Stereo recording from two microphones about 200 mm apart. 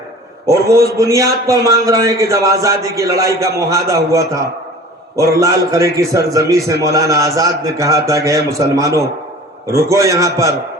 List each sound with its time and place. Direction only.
0.4 s a man's voice: 15° right (ahead or behind)